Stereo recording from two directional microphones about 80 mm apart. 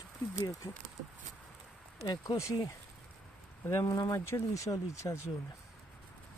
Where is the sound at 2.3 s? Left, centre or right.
Left.